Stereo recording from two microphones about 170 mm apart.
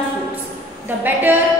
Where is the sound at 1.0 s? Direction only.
10° right (ahead or behind).